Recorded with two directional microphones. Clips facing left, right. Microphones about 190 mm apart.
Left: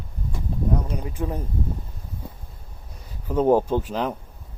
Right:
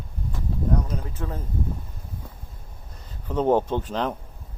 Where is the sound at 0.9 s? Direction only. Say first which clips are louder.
Left 3 dB; 15° left (ahead or behind).